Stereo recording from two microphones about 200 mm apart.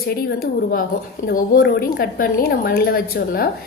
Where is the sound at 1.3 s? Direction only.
50° left (ahead or behind).